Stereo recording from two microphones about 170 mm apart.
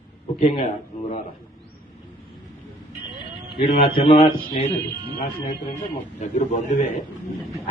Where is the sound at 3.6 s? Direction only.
35° left (ahead or behind).